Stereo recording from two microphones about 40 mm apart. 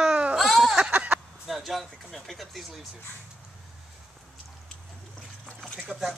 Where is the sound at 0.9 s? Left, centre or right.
Right.